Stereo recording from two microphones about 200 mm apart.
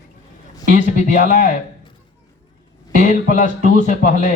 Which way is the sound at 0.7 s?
40° left (ahead or behind).